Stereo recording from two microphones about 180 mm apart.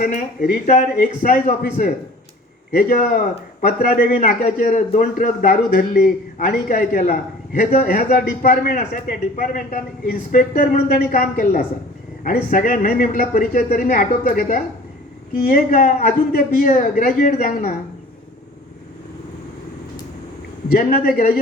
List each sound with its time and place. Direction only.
0.0 s a man's voice: 50° left (ahead or behind)
20.7 s a man's voice: 50° left (ahead or behind)